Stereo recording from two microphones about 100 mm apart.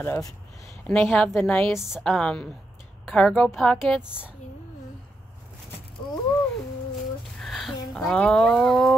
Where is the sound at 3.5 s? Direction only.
5° left (ahead or behind).